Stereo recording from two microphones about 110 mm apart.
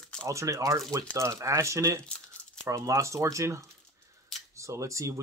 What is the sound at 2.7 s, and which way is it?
Speech, 25° right (ahead or behind).